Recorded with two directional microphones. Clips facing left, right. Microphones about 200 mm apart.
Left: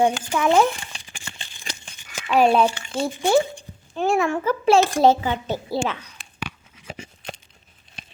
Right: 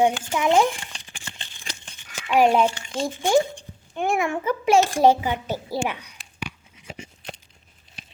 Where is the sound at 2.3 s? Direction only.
15° right (ahead or behind).